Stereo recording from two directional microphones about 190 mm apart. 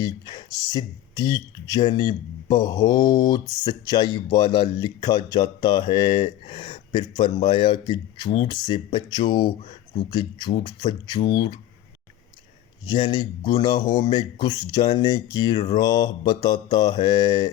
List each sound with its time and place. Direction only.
0.0 s speech: 20° left (ahead or behind)
12.8 s speech: 25° left (ahead or behind)